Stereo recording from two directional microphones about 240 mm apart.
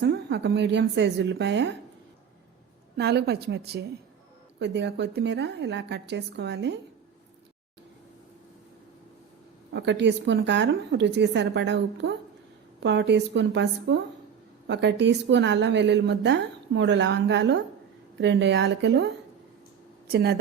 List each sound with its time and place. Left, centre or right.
0.0 s a woman's voice: right
3.0 s a woman's voice: right
9.7 s a woman's voice: right